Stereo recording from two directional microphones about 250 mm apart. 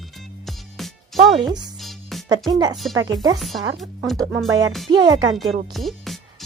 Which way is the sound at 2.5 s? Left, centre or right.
Centre.